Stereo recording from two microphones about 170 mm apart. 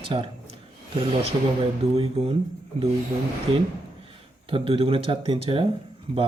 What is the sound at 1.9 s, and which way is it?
Speech, 35° right (ahead or behind).